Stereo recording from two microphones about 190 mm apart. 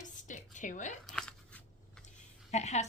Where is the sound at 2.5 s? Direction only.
35° left (ahead or behind).